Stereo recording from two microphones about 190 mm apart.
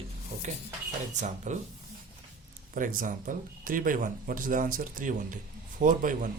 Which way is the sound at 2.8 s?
45° right (ahead or behind).